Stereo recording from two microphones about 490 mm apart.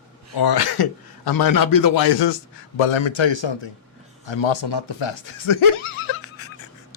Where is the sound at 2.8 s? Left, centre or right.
Left.